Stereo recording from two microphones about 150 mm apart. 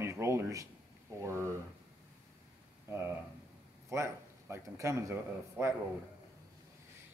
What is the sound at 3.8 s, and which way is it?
Speech, 20° right (ahead or behind).